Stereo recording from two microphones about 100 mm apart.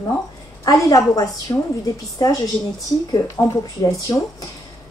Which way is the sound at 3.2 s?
35° left (ahead or behind).